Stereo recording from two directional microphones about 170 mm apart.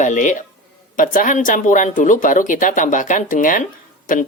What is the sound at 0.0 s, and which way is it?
A woman's voice, 45° left (ahead or behind).